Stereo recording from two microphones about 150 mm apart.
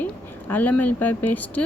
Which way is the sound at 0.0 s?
10° left (ahead or behind).